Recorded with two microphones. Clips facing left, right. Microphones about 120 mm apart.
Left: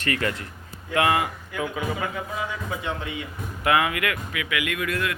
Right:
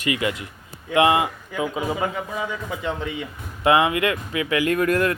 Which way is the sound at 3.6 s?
25° right (ahead or behind).